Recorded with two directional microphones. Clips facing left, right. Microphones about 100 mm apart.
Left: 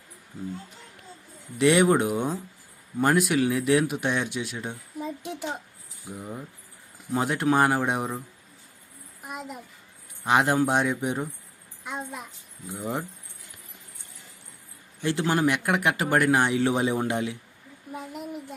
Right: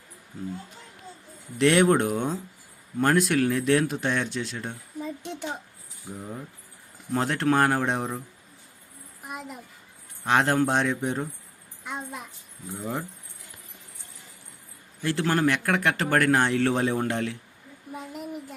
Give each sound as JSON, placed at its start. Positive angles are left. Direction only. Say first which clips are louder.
{"t": 1.5, "sound": "speech", "louder": "even", "side_deg": 5}
{"t": 9.2, "sound": "a child's voice", "louder": "left 1 dB", "side_deg": 0}
{"t": 10.2, "sound": "speech", "louder": "even", "side_deg": 10}
{"t": 11.9, "sound": "speech", "louder": "left 1 dB", "side_deg": 0}
{"t": 12.7, "sound": "speech", "louder": "left 1 dB", "side_deg": 20}
{"t": 15.0, "sound": "speech", "louder": "even", "side_deg": 20}
{"t": 17.9, "sound": "speech", "louder": "even", "side_deg": 0}